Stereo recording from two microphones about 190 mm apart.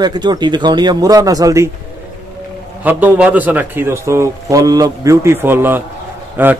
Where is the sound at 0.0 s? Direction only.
20° right (ahead or behind).